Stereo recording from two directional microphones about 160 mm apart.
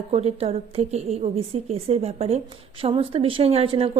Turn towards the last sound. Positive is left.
turn(degrees=-35)  # may be behind; listen again after turning